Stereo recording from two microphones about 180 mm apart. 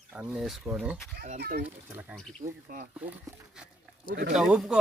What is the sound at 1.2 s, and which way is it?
Speech, 55° right (ahead or behind).